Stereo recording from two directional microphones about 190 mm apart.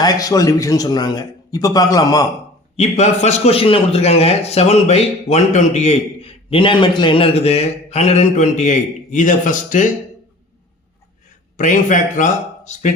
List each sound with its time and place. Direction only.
0.0 s a man's voice: 20° left (ahead or behind)
2.7 s a man's voice: 35° left (ahead or behind)
11.5 s a man's voice: 40° left (ahead or behind)